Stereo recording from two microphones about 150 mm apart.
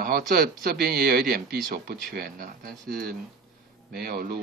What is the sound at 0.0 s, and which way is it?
Speech, 80° right.